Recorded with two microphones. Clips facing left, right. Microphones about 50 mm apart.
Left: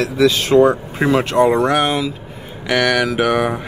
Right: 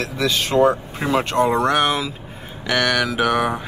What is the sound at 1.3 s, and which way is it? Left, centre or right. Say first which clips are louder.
Speech: left 3 dB; left.